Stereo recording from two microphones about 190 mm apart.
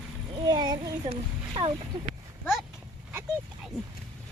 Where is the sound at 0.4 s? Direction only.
20° right (ahead or behind).